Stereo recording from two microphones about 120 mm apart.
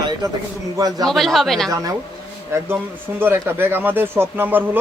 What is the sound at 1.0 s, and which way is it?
Speech, centre (ahead or behind).